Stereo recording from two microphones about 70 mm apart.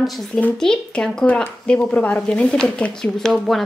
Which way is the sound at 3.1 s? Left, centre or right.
Centre.